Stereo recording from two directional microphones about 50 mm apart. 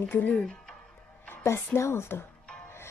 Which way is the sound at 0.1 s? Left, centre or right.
Left.